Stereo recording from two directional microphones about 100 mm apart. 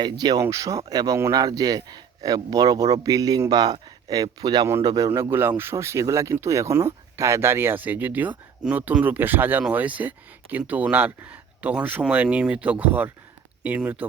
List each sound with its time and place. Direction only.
0.0 s speech: 45° right (ahead or behind)
0.4 s speech: 30° right (ahead or behind)
5.3 s speech: 20° right (ahead or behind)